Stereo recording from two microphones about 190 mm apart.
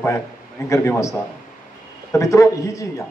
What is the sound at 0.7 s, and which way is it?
Speech, 15° left (ahead or behind).